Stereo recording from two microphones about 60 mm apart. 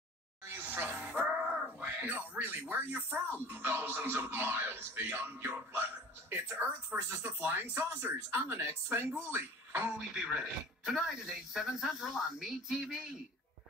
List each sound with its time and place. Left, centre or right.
0.5 s a sound: right
1.8 s speech: right
9.9 s speech: centre